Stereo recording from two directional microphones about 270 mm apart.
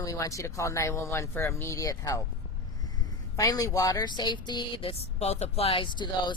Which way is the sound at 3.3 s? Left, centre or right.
Centre.